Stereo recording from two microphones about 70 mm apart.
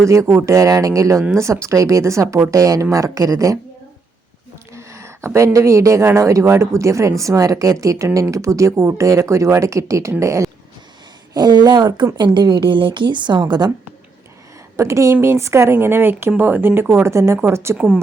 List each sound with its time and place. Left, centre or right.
0.0 s speech: right
4.7 s a sound: right
5.5 s speech: right
11.3 s speech: right
14.8 s speech: right
17.7 s a woman's voice: centre